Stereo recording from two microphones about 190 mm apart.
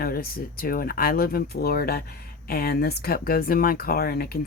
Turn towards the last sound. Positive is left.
turn(degrees=55)  # may be behind; listen again after turning